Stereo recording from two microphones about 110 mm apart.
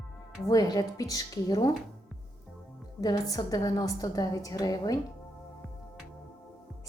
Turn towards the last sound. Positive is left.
turn(degrees=35)  # may be behind; listen again after turning